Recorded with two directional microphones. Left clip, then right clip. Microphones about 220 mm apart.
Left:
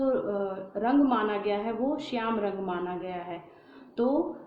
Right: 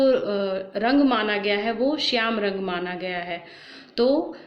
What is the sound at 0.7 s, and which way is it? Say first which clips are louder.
Speech: right 4 dB; 40° right (ahead or behind).